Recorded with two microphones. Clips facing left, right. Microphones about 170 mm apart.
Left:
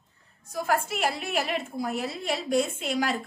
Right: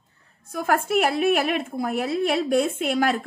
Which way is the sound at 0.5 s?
55° right (ahead or behind).